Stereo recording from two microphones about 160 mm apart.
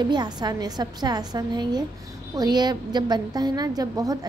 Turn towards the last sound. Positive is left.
turn(degrees=-25)  # may be behind; listen again after turning